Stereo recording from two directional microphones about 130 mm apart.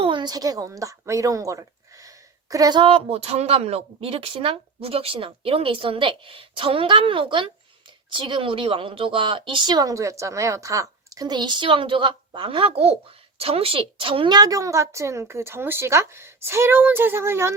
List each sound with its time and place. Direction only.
0.0 s speech: 35° right (ahead or behind); by 17.5 s 20° right (ahead or behind)